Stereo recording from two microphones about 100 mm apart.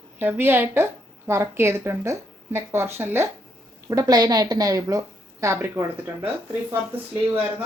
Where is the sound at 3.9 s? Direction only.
35° right (ahead or behind).